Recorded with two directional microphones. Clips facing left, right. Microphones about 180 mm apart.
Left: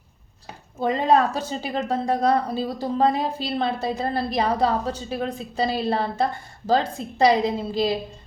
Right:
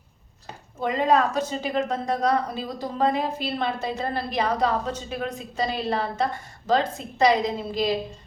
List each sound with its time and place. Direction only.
0.8 s a woman's voice: 30° left (ahead or behind)